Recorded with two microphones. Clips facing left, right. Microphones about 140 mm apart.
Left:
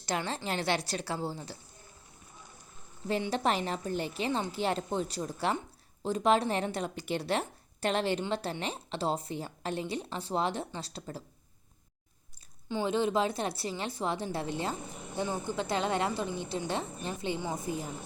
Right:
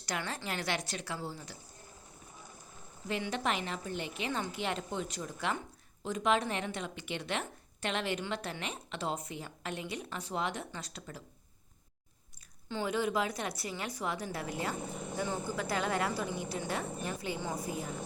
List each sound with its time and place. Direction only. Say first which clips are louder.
0.0 s a woman's voice: left 4 dB; 25° left (ahead or behind)
3.1 s a woman's voice: left 4 dB; 35° left (ahead or behind)
12.6 s a woman's voice: left 4 dB; 20° left (ahead or behind)